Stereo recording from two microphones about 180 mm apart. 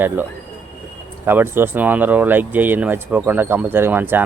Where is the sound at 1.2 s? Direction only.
10° right (ahead or behind).